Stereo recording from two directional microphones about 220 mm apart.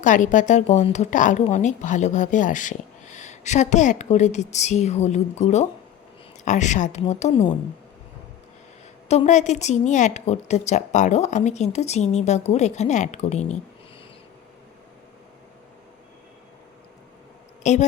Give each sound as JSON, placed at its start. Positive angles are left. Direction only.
{"t": 0.0, "sound": "speech", "side_deg": 35}
{"t": 9.0, "sound": "speech", "side_deg": 30}
{"t": 17.6, "sound": "speech", "side_deg": 30}